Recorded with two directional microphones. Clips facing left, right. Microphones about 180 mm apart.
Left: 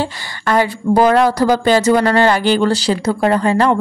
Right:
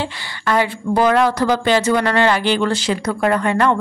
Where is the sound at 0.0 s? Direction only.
40° left (ahead or behind).